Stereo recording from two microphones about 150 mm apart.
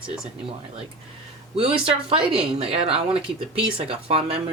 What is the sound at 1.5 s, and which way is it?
Speech, 40° right (ahead or behind).